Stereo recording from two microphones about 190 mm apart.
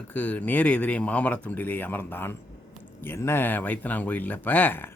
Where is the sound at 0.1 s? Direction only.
10° left (ahead or behind).